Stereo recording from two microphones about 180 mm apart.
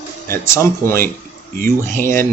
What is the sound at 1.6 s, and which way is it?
Speech, 50° right (ahead or behind).